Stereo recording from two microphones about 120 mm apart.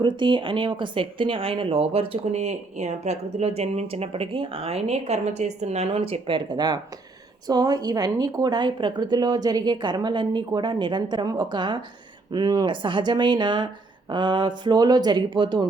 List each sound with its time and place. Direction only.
0.0 s speech: 40° right (ahead or behind)